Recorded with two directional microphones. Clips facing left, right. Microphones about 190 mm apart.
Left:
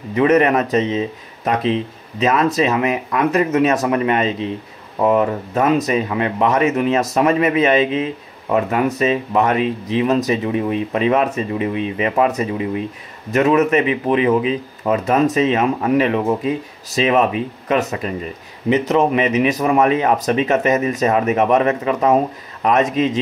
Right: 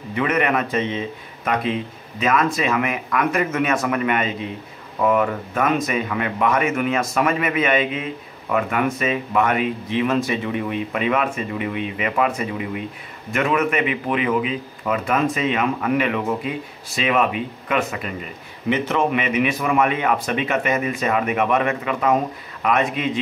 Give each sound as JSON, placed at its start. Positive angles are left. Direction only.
{"t": 0.3, "sound": "speech", "side_deg": 40}